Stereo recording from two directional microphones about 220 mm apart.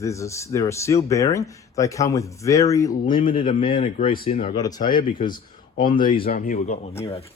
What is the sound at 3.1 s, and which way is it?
Speech, 40° left (ahead or behind).